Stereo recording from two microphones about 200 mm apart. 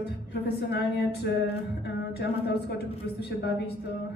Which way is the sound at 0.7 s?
55° left (ahead or behind).